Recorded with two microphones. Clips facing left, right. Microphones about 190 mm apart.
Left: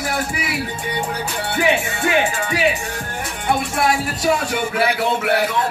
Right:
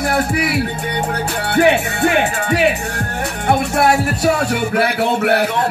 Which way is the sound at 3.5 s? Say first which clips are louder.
Right 4 dB; 65° right (ahead or behind).